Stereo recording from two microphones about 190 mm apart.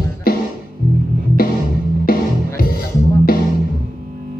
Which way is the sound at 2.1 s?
50° left (ahead or behind).